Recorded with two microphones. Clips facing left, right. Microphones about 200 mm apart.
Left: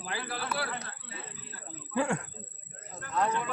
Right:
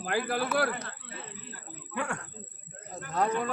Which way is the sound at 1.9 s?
25° left (ahead or behind).